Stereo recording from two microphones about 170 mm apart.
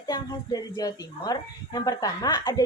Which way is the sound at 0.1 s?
25° left (ahead or behind).